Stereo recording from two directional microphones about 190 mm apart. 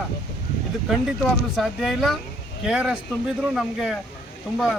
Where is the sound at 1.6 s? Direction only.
Centre (ahead or behind).